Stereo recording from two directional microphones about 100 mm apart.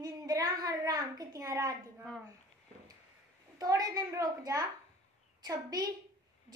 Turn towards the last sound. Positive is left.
turn(degrees=-40)  # may be behind; listen again after turning